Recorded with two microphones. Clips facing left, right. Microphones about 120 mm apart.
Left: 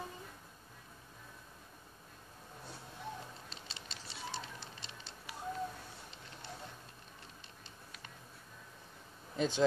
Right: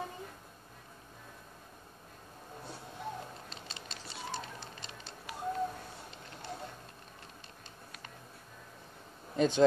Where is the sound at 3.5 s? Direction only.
50° right (ahead or behind).